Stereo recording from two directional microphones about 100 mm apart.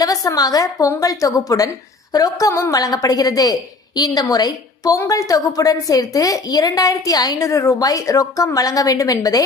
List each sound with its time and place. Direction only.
0.0 s a woman's voice: 40° left (ahead or behind)